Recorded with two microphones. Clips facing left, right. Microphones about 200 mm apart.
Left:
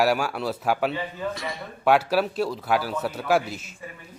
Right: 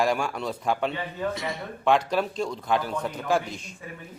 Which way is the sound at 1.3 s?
20° right (ahead or behind).